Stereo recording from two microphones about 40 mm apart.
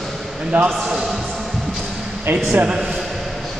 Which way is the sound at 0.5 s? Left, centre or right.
Right.